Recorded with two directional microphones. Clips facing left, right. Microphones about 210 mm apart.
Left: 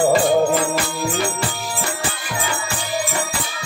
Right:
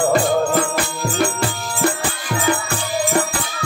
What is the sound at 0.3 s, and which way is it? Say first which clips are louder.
Music: left 2 dB; 10° left (ahead or behind).